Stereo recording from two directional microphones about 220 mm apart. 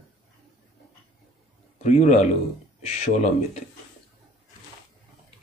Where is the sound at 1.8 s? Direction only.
30° left (ahead or behind).